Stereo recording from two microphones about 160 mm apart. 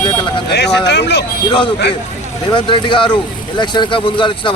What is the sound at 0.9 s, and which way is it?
Speech, 90° left.